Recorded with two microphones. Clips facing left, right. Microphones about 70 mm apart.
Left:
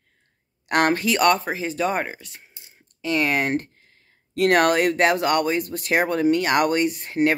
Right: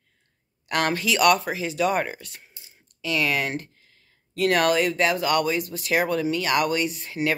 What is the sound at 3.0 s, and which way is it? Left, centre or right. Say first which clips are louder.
Speech: left 3 dB; left.